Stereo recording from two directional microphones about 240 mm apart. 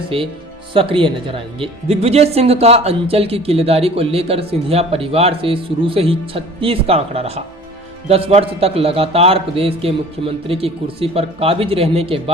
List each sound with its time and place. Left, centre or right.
0.1 s speech: right